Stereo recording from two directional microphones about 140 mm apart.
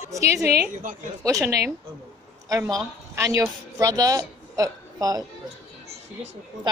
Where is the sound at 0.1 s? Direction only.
20° right (ahead or behind).